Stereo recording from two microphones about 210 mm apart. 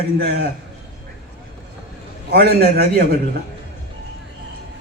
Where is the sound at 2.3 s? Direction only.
50° right (ahead or behind).